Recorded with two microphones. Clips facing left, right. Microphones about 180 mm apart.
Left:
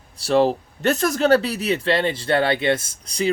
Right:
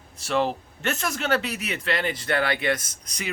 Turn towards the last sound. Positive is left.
turn(degrees=30)  # may be behind; listen again after turning